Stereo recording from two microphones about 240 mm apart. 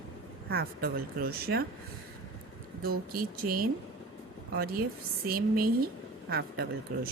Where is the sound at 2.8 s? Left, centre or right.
Right.